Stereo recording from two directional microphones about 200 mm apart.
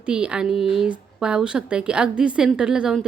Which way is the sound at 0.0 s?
5° right (ahead or behind).